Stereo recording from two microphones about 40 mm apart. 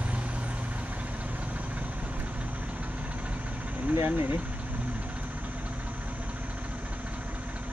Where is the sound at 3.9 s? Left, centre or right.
Right.